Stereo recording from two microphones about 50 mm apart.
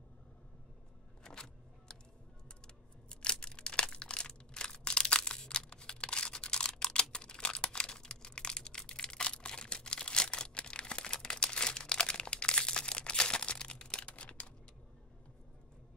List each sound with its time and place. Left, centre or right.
1.2 s music: centre
2.6 s a sound: centre
11.1 s crumpling: centre